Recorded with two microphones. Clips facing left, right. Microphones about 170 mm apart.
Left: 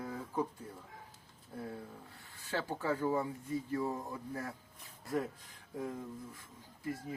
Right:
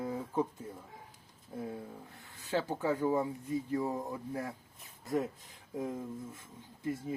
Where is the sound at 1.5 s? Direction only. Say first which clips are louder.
Right 3 dB; 15° right (ahead or behind).